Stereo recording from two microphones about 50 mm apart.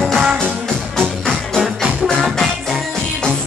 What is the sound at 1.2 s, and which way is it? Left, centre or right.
Music, centre.